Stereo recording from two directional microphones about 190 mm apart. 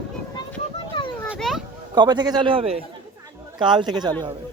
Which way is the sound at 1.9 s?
20° right (ahead or behind).